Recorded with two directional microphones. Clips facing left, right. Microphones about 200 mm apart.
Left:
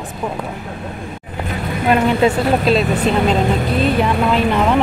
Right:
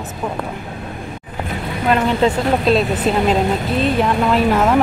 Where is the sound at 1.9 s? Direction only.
15° left (ahead or behind).